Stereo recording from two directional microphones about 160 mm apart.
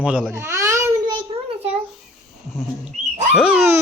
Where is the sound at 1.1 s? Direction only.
35° right (ahead or behind).